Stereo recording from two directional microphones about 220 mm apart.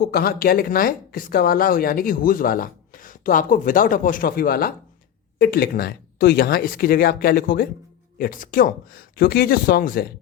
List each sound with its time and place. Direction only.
0.0 s speech: 45° left (ahead or behind)